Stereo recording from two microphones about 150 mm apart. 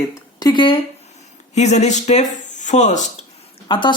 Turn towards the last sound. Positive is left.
turn(degrees=35)  # may be behind; listen again after turning